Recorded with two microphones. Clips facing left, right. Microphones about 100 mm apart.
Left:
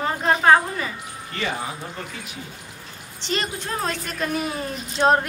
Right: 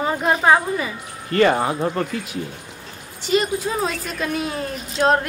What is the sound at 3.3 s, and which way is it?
Speech, 5° right (ahead or behind).